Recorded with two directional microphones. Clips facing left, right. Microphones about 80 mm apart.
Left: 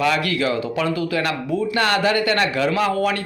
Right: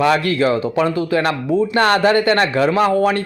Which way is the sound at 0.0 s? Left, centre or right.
Right.